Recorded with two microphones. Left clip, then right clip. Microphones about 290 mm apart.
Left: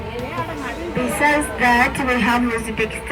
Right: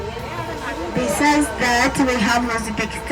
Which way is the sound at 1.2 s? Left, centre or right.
Right.